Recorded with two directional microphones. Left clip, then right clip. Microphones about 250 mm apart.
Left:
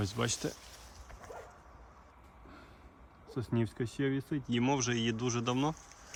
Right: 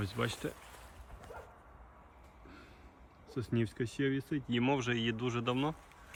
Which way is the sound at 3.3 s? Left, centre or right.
Centre.